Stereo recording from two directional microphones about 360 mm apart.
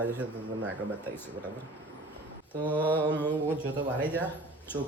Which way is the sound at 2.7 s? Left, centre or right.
Centre.